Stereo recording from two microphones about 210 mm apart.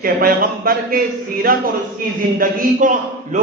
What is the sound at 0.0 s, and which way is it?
A man's voice, 45° right (ahead or behind).